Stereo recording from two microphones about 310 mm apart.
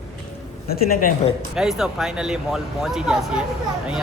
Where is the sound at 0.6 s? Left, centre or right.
Left.